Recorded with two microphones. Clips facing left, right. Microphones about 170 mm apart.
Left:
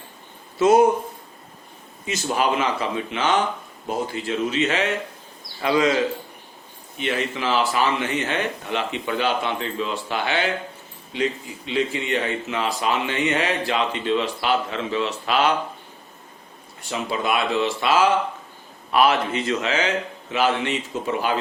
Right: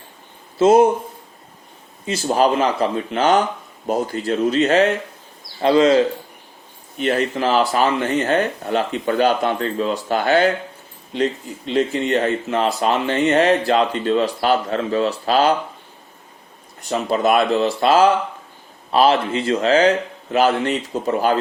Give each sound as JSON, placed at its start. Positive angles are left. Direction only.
{"t": 0.6, "sound": "speech", "side_deg": -25}
{"t": 2.0, "sound": "speech", "side_deg": -35}
{"t": 5.5, "sound": "speech", "side_deg": -30}
{"t": 7.0, "sound": "speech", "side_deg": -40}
{"t": 11.7, "sound": "speech", "side_deg": -45}
{"t": 16.9, "sound": "speech", "side_deg": -45}